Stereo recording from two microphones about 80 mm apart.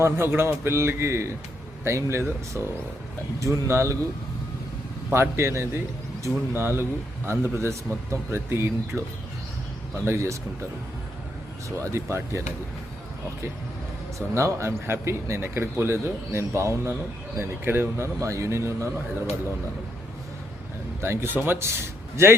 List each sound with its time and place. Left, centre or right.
0.0 s a man's voice: right
2.5 s speech: right
3.4 s a man's voice: right
5.1 s a man's voice: right
11.8 s a man's voice: right
14.3 s a man's voice: right
21.0 s speech: right